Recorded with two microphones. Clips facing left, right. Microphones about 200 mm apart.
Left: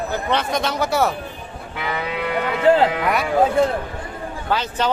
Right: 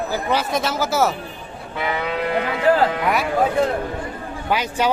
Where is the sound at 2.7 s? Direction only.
25° left (ahead or behind).